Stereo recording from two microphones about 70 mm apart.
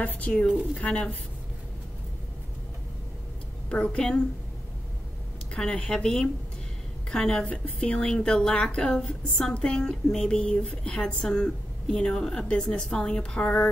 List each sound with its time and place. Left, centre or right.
0.0 s speech: left
3.6 s a woman's voice: centre
5.5 s a woman's voice: centre